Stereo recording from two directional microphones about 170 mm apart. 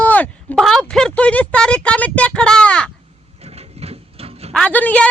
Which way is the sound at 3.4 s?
35° right (ahead or behind).